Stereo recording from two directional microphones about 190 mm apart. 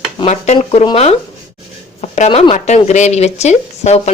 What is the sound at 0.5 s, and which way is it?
Speech, 25° left (ahead or behind).